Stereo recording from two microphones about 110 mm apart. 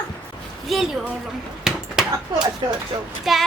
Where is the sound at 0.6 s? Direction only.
Centre (ahead or behind).